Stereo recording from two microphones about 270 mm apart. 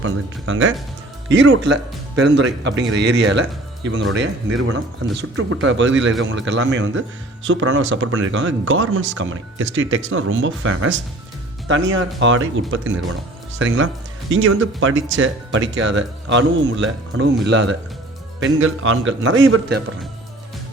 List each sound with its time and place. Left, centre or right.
0.0 s speech: right